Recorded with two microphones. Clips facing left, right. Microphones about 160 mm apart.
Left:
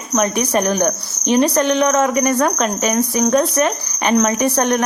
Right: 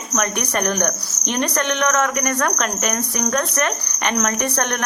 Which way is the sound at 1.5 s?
35° left (ahead or behind).